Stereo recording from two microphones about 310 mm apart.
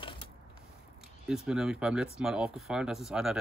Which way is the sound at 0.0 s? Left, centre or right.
Centre.